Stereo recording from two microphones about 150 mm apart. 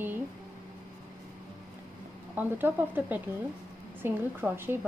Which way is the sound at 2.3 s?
10° right (ahead or behind).